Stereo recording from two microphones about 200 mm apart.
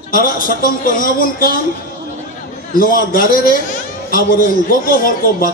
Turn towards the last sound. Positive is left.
turn(degrees=45)  # may be behind; listen again after turning